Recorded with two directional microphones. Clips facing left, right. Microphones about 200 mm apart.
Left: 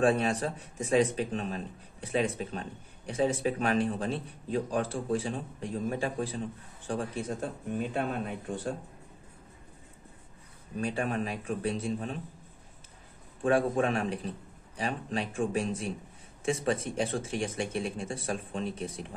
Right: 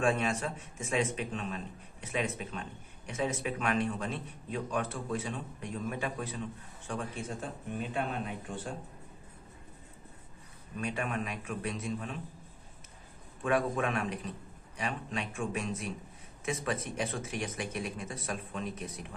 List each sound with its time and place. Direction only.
0.0 s speech: 35° left (ahead or behind)
10.8 s speech: 30° left (ahead or behind)
13.4 s speech: 30° left (ahead or behind)